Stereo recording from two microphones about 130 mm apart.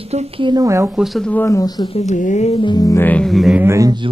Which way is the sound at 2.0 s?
65° left (ahead or behind).